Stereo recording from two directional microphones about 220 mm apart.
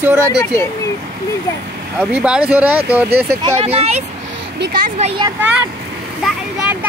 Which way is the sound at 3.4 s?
25° right (ahead or behind).